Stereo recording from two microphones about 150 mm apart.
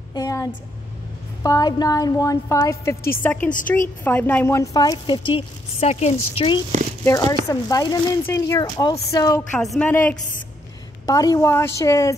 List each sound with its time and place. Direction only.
0.1 s a woman's voice: 25° left (ahead or behind)
5.8 s a woman's voice: 45° left (ahead or behind)
7.1 s speech: 25° left (ahead or behind)
9.6 s a woman's voice: 5° left (ahead or behind)
11.1 s speech: 25° left (ahead or behind)